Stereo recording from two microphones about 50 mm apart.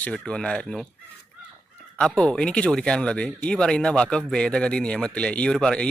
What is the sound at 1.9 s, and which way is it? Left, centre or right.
A man's voice, centre.